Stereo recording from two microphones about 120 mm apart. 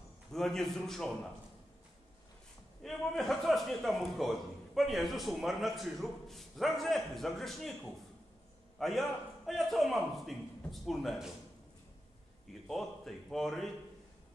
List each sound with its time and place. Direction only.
0.3 s a man's voice: 5° left (ahead or behind)
2.8 s a man's voice: 5° left (ahead or behind)
8.7 s a man's voice: centre (ahead or behind)
12.6 s a man's voice: centre (ahead or behind)